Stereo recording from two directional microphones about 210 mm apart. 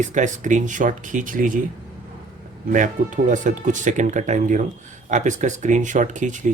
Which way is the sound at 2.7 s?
40° right (ahead or behind).